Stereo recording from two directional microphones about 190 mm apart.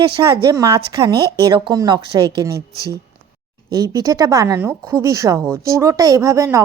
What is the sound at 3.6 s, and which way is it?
A woman's voice, 20° right (ahead or behind).